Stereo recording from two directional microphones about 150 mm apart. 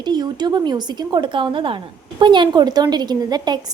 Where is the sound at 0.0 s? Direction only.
30° right (ahead or behind).